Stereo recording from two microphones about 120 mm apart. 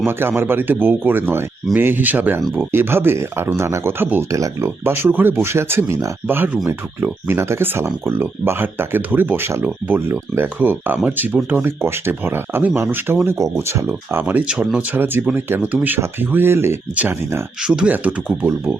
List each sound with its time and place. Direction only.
0.0 s speech: 20° right (ahead or behind)